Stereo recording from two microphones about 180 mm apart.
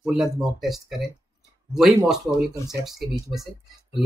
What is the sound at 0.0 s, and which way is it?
Speech, 5° right (ahead or behind).